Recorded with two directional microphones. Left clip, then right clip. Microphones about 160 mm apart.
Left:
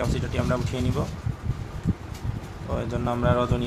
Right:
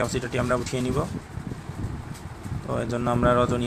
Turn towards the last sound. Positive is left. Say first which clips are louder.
# right 3 dB
turn(degrees=-20)  # may be behind; listen again after turning